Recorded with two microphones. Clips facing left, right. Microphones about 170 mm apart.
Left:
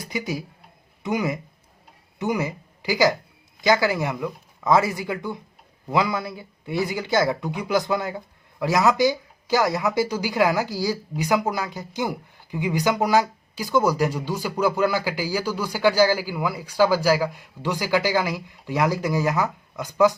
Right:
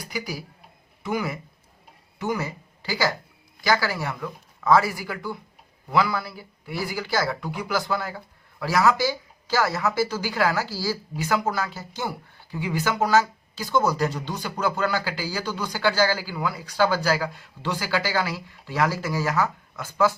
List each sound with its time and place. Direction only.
0.0 s a man's voice: 20° left (ahead or behind)